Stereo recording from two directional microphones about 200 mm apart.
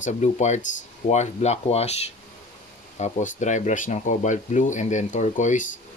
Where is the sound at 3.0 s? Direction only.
35° left (ahead or behind).